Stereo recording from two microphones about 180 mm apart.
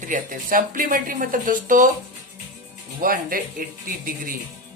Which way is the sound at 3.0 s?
50° right (ahead or behind).